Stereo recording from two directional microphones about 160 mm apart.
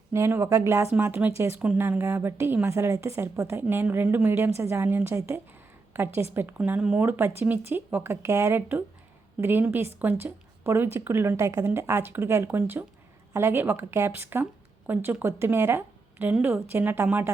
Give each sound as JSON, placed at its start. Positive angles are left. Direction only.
{"t": 0.1, "sound": "a woman's voice", "side_deg": -15}